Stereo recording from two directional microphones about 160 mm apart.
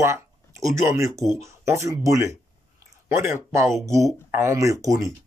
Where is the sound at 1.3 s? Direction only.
20° right (ahead or behind).